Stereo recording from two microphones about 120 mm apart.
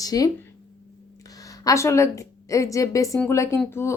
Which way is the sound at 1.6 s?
25° left (ahead or behind).